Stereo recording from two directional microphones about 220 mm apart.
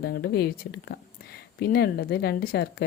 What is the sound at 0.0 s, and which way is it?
Speech, 45° left (ahead or behind).